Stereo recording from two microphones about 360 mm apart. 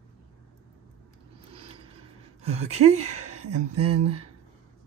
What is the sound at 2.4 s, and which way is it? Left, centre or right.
Speech, centre.